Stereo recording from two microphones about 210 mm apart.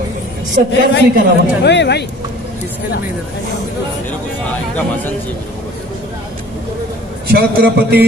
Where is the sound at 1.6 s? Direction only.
55° left (ahead or behind).